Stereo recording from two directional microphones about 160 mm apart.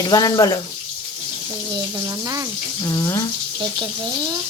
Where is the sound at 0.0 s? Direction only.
25° left (ahead or behind).